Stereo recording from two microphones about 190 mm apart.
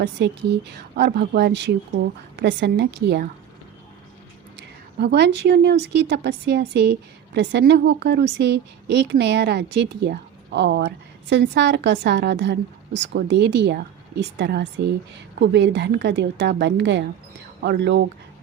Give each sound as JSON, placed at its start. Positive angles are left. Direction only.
{"t": 0.2, "sound": "a woman's voice", "side_deg": -60}
{"t": 4.5, "sound": "a woman's voice", "side_deg": -60}